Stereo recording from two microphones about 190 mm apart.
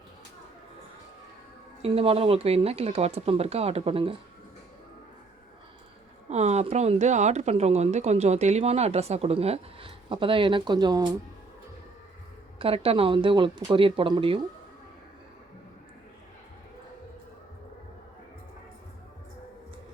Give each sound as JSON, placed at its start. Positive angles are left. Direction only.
{"t": 1.8, "sound": "a woman's voice", "side_deg": -30}
{"t": 6.2, "sound": "a woman's voice", "side_deg": -35}
{"t": 12.5, "sound": "speech", "side_deg": -30}